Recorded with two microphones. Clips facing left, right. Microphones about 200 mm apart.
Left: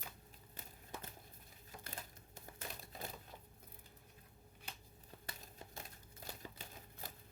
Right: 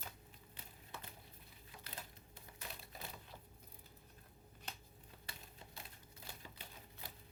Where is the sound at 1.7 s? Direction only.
45° left (ahead or behind).